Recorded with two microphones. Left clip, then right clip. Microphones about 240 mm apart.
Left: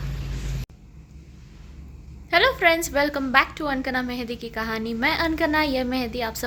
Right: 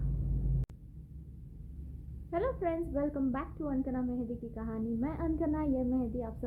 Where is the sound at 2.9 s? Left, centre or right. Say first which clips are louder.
Left 14 dB; left.